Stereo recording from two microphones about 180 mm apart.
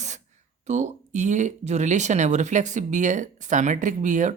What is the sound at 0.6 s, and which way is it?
Speech, 40° right (ahead or behind).